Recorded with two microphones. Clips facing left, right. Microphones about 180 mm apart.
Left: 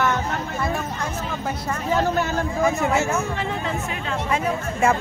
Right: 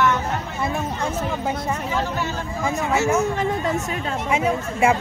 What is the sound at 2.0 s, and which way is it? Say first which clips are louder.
Speech: left 4 dB; 50° left (ahead or behind).